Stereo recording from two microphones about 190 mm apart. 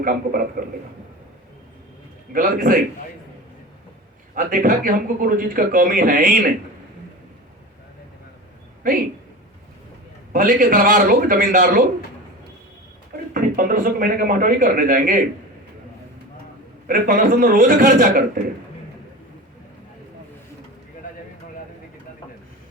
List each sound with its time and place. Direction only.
0.0 s a man's voice: 50° right (ahead or behind)
2.3 s a man's voice: 45° right (ahead or behind)
4.4 s a man's voice: 45° right (ahead or behind)
10.3 s a man's voice: 45° right (ahead or behind)
13.3 s a man's voice: 45° right (ahead or behind)
16.8 s a man's voice: 45° right (ahead or behind)